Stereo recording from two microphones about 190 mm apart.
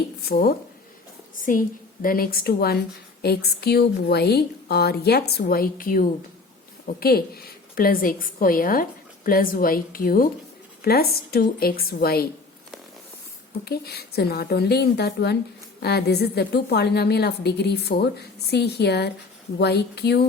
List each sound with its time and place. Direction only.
1.4 s a woman's voice: 45° left (ahead or behind)
13.7 s a woman's voice: 55° left (ahead or behind)